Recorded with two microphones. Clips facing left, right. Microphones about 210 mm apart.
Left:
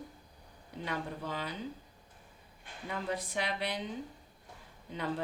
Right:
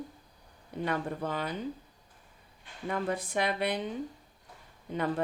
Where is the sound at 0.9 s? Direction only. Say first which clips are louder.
Right 5 dB; 55° right (ahead or behind).